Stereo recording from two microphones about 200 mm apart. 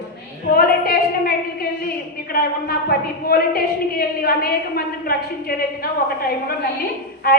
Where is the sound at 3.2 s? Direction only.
50° left (ahead or behind).